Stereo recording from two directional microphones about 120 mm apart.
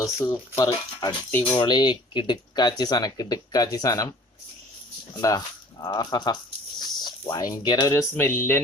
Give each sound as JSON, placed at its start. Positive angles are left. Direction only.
{"t": 0.3, "sound": "speech", "side_deg": 25}
{"t": 1.5, "sound": "speech", "side_deg": 40}
{"t": 5.2, "sound": "speech", "side_deg": 30}
{"t": 5.8, "sound": "speech", "side_deg": 40}
{"t": 8.1, "sound": "a sound", "side_deg": 20}